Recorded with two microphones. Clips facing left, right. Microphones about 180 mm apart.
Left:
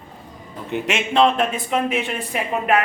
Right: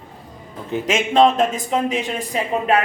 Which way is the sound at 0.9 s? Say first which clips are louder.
Right 3 dB; 45° right (ahead or behind).